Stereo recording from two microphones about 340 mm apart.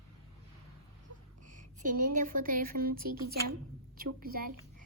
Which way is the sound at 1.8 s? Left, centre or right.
Right.